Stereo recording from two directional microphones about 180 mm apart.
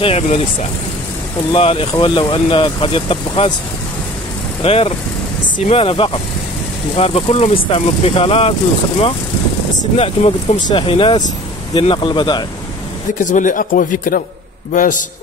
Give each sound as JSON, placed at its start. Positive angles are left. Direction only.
{"t": 0.0, "sound": "speech", "side_deg": 35}
{"t": 1.5, "sound": "speech", "side_deg": 30}
{"t": 4.6, "sound": "speech", "side_deg": 35}
{"t": 9.9, "sound": "speech", "side_deg": 35}
{"t": 13.2, "sound": "speech", "side_deg": 45}